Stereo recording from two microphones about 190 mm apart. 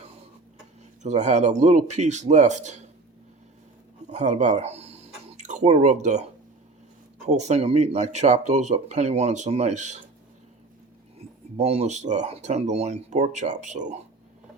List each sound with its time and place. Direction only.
1.0 s speech: 40° right (ahead or behind)
4.0 s speech: 40° right (ahead or behind)
7.3 s speech: 35° right (ahead or behind)
11.2 s speech: 30° right (ahead or behind)